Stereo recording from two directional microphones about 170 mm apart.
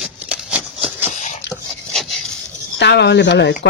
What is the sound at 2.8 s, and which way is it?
Speech, 85° left.